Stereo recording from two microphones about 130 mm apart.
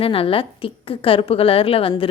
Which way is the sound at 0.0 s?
45° left (ahead or behind).